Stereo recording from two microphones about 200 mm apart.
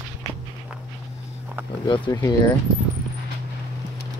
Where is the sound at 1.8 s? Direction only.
25° left (ahead or behind).